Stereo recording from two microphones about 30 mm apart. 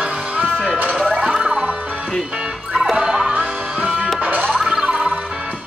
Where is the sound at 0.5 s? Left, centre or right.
Left.